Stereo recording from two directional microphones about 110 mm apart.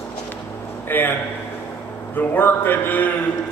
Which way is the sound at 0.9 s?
20° left (ahead or behind).